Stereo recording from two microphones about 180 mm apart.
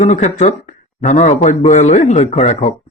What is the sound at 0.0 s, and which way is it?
A man's voice, 40° left (ahead or behind).